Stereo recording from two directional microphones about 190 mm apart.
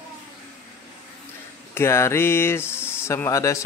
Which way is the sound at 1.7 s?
15° left (ahead or behind).